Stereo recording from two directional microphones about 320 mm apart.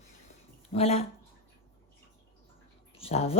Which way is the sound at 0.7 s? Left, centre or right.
Centre.